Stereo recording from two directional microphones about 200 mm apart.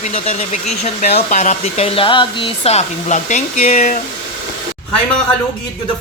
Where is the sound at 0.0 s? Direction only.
30° left (ahead or behind).